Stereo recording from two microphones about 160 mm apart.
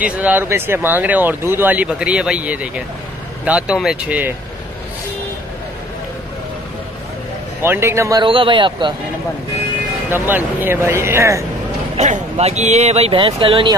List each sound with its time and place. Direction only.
0.0 s speech: 10° right (ahead or behind)
7.6 s speech: 15° right (ahead or behind)
8.2 s speech: 30° right (ahead or behind)
10.0 s speech: 15° right (ahead or behind)
12.0 s speech: 45° right (ahead or behind)